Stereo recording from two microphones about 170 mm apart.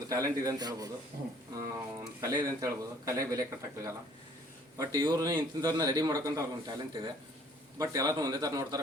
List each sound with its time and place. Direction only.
0.1 s speech: 20° right (ahead or behind)